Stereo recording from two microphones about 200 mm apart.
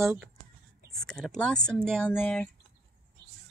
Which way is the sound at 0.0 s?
5° right (ahead or behind).